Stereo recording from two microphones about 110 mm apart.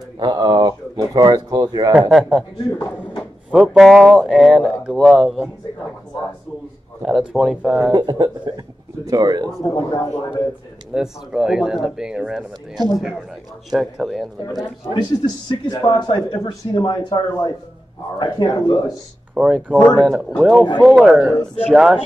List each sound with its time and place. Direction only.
0.2 s speech: 40° right (ahead or behind)
2.0 s speech: 10° right (ahead or behind)
7.0 s speech: centre (ahead or behind)
7.9 s speech: 40° right (ahead or behind)
9.8 s a man's voice: 30° left (ahead or behind)
10.9 s speech: 5° right (ahead or behind)
15.0 s speech: 40° left (ahead or behind)
19.3 s speech: 5° right (ahead or behind)